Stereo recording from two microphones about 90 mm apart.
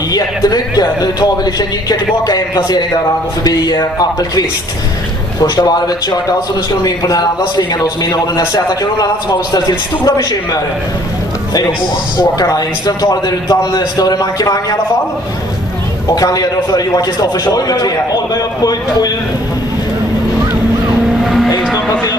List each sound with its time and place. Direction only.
0.1 s a man's voice: 45° left (ahead or behind)
5.6 s a man's voice: 50° left (ahead or behind)
12.2 s a man's voice: 45° left (ahead or behind)
16.2 s a man's voice: 45° left (ahead or behind)
21.2 s vehicle: 5° right (ahead or behind)